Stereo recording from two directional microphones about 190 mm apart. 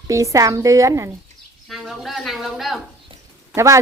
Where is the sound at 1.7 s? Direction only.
Centre (ahead or behind).